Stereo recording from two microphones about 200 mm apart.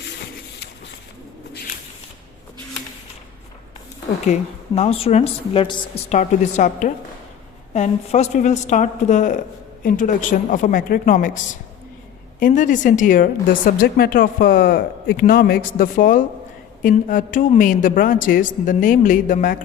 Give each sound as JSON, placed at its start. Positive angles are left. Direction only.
{"t": 4.3, "sound": "a woman's voice", "side_deg": 35}
{"t": 6.1, "sound": "a woman's voice", "side_deg": 35}